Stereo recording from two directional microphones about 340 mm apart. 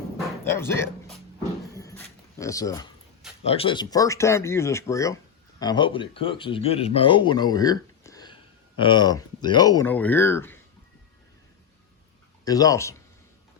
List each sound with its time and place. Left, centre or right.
0.4 s speech: centre
1.7 s a sound: centre
3.4 s speech: centre
12.5 s speech: centre